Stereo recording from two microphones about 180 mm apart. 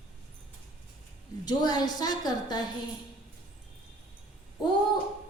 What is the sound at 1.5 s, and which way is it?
A woman's voice, 20° left (ahead or behind).